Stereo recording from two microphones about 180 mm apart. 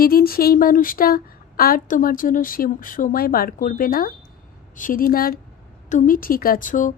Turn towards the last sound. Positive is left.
turn(degrees=45)  # may be behind; listen again after turning